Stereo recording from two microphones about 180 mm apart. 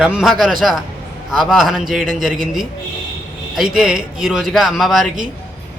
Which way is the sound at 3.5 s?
5° right (ahead or behind).